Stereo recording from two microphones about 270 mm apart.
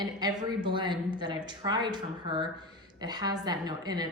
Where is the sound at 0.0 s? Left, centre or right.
Centre.